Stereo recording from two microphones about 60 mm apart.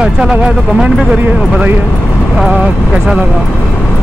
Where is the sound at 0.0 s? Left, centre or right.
Centre.